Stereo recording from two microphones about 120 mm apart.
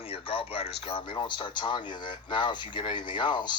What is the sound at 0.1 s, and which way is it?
Speech, 50° left (ahead or behind).